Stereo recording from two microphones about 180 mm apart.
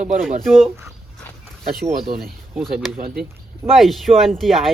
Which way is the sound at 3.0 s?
55° right (ahead or behind).